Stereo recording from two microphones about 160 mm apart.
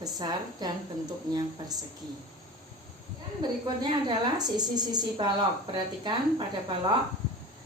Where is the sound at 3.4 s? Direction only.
25° right (ahead or behind).